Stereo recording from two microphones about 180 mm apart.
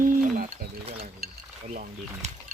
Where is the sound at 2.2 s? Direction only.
40° right (ahead or behind).